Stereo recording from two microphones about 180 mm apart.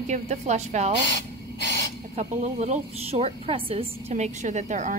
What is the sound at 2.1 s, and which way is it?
A woman's voice, 40° right (ahead or behind).